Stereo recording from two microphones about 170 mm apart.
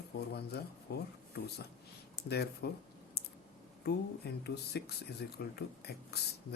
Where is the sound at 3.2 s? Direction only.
70° left (ahead or behind).